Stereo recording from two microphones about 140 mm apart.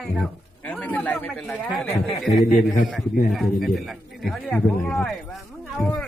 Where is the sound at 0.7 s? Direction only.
10° left (ahead or behind).